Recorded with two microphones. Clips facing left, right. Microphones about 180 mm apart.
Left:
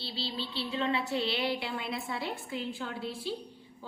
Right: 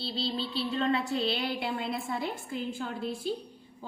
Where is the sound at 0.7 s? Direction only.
50° right (ahead or behind).